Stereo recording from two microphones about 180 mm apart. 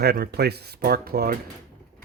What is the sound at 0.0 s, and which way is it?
Speech, 60° right (ahead or behind).